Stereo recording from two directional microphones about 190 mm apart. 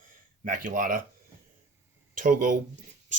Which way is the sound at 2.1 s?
45° right (ahead or behind).